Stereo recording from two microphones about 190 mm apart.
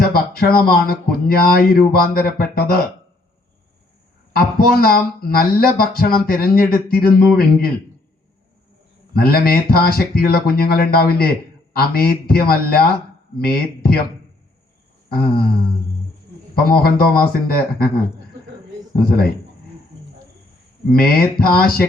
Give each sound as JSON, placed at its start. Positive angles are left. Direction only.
{"t": 0.0, "sound": "speech", "side_deg": 50}
{"t": 4.6, "sound": "speech", "side_deg": 50}
{"t": 9.1, "sound": "speech", "side_deg": 50}
{"t": 15.1, "sound": "speech", "side_deg": 55}
{"t": 16.6, "sound": "speech", "side_deg": 50}
{"t": 20.9, "sound": "speech", "side_deg": 55}